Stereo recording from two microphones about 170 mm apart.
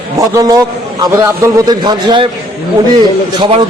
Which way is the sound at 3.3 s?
25° right (ahead or behind).